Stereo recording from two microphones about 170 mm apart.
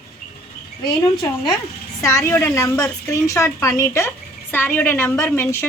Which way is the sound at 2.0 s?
15° left (ahead or behind).